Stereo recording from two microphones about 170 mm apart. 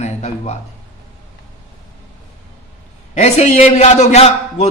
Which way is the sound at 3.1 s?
45° left (ahead or behind).